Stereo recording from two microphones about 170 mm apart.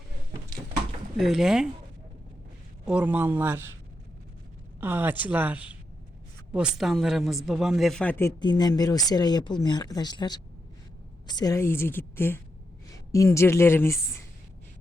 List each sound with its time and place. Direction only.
1.1 s speech: centre (ahead or behind)
2.8 s speech: 5° right (ahead or behind)
4.8 s speech: 10° right (ahead or behind); by 8.3 s 10° left (ahead or behind)
8.4 s a woman's voice: 25° left (ahead or behind)